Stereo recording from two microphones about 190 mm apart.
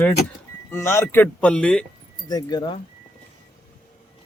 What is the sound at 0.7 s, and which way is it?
Speech, 15° left (ahead or behind).